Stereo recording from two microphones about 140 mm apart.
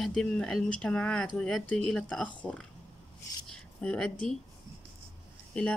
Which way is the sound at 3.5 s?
5° left (ahead or behind).